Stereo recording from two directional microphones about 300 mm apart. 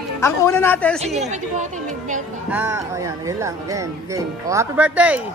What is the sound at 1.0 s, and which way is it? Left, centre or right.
A woman's voice, right.